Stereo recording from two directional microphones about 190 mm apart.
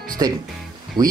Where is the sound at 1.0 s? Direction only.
20° right (ahead or behind).